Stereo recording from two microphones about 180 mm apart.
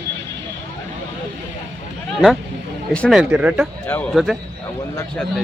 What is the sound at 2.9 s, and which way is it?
Speech, 5° left (ahead or behind).